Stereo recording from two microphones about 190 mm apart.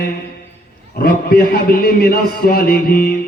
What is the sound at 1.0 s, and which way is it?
A man's voice, 50° left (ahead or behind).